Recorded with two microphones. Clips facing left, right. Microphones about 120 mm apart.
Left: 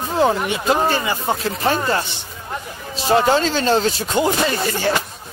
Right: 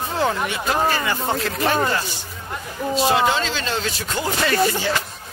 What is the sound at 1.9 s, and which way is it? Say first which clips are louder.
Speech: left 3 dB; 30° left (ahead or behind).